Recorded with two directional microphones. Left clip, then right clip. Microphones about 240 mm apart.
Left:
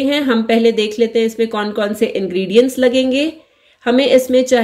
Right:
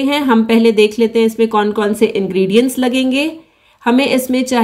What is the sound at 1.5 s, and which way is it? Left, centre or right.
Speech, centre.